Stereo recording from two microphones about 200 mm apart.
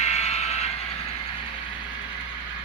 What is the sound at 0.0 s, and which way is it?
Vehicle, 35° left (ahead or behind).